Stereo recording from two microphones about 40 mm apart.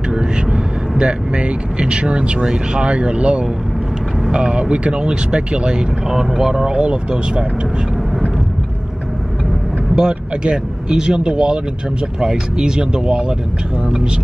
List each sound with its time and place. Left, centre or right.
0.1 s vehicle: right
2.4 s speech: right
6.0 s speech: centre
9.9 s speech: right